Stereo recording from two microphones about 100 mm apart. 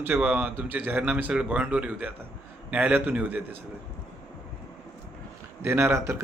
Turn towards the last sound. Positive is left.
turn(degrees=-25)  # may be behind; listen again after turning